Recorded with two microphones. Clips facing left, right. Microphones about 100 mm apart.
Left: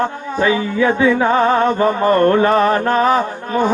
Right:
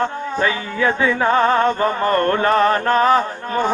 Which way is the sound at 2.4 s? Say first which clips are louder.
Left 2 dB; 20° left (ahead or behind).